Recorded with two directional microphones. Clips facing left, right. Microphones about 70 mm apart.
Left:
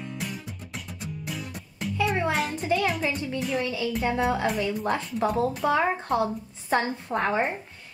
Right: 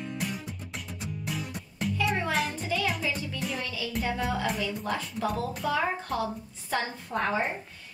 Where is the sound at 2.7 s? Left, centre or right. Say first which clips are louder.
Left 4 dB; left.